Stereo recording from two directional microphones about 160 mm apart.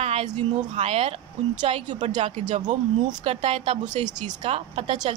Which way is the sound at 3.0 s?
35° right (ahead or behind).